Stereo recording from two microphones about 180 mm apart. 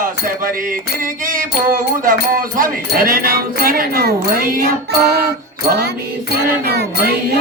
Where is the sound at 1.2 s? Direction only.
50° right (ahead or behind).